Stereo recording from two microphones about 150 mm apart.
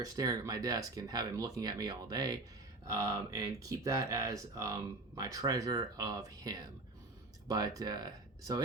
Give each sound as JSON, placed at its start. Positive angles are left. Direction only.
{"t": 0.0, "sound": "speech", "side_deg": -25}